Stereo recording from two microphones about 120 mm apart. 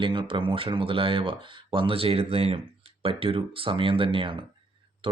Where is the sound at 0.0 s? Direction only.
45° right (ahead or behind).